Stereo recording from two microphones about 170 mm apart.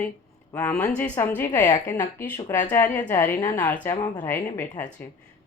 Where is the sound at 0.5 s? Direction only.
10° left (ahead or behind).